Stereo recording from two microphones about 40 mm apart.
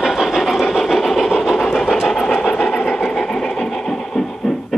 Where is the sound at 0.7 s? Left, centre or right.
Centre.